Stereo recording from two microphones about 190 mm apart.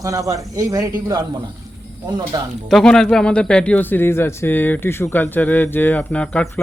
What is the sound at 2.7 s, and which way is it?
Speech, 5° left (ahead or behind).